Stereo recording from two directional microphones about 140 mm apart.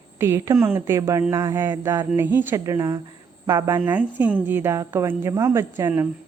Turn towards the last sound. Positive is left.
turn(degrees=-20)  # may be behind; listen again after turning